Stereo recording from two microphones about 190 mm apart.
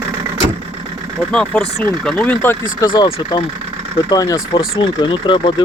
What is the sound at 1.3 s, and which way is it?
Speech, 5° left (ahead or behind).